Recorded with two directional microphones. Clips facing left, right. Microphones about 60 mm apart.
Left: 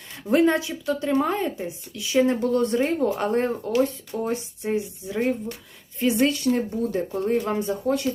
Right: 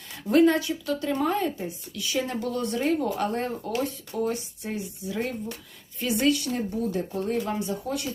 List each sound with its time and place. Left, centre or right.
0.3 s speech: left